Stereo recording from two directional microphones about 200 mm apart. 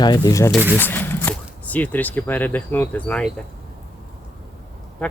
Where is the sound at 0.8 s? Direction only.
10° left (ahead or behind).